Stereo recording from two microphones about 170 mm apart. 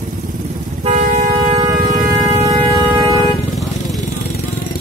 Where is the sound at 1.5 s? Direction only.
25° right (ahead or behind).